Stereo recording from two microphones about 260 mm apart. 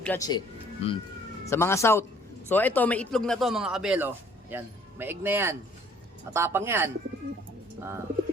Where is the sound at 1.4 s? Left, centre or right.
Centre.